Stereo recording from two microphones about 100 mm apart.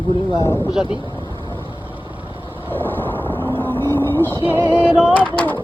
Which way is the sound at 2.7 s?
20° left (ahead or behind).